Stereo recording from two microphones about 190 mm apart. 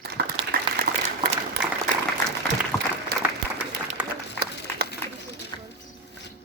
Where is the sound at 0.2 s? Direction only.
55° right (ahead or behind).